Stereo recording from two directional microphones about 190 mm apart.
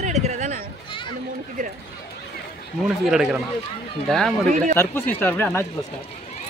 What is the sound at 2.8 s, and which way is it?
A man's voice, centre (ahead or behind).